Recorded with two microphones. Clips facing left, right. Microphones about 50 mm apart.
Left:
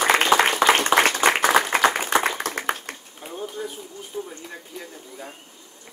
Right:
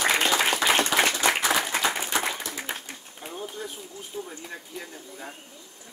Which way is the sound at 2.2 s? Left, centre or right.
Left.